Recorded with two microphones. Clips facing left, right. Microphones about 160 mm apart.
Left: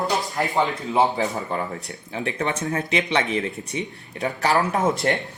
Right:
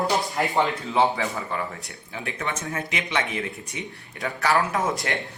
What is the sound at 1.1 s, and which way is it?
Speech, 35° left (ahead or behind).